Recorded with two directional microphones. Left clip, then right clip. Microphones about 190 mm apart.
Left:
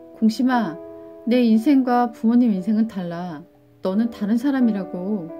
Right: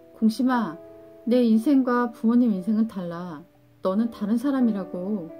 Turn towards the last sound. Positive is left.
turn(degrees=15)  # may be behind; listen again after turning